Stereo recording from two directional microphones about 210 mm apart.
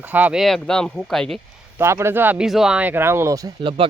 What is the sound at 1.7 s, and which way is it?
Speech, 10° right (ahead or behind).